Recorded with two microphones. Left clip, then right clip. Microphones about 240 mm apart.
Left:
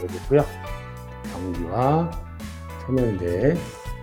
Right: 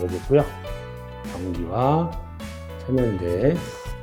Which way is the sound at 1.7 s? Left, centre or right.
Centre.